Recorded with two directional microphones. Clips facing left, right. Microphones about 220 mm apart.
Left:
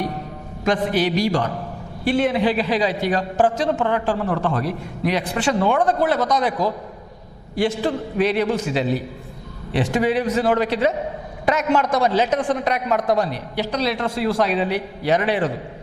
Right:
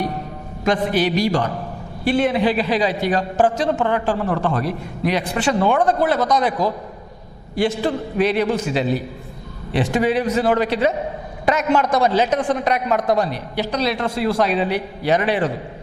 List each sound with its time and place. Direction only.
0.6 s a man's voice: 15° right (ahead or behind)